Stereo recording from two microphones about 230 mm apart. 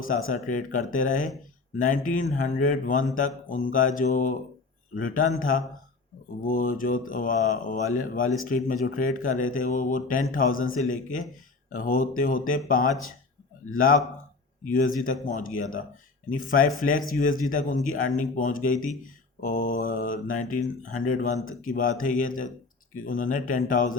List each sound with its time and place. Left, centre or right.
0.3 s speech: left
15.0 s speech: left